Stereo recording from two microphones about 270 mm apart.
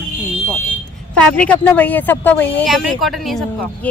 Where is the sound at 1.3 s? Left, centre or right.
Centre.